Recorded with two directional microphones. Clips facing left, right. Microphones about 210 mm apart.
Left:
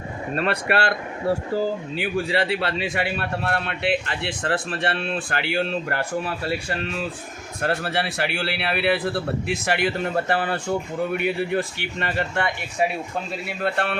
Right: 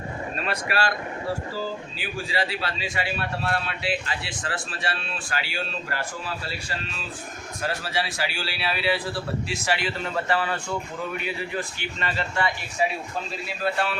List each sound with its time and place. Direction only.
0.3 s speech: 65° left (ahead or behind)
13.6 s speech: 60° left (ahead or behind)